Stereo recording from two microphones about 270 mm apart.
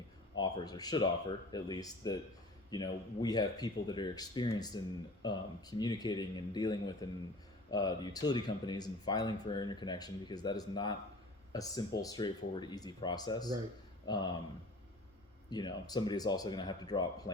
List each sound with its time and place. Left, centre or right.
0.3 s speech: centre
15.4 s speech: centre